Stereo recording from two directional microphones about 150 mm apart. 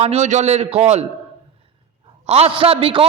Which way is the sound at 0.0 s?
45° right (ahead or behind).